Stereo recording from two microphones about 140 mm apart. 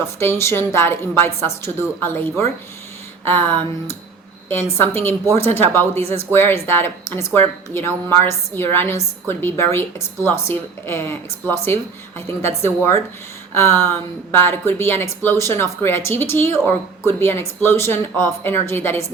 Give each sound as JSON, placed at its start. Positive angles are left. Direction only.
{"t": 0.2, "sound": "speech", "side_deg": 20}